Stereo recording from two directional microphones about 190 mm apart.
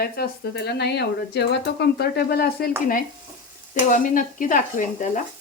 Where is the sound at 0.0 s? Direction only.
55° left (ahead or behind).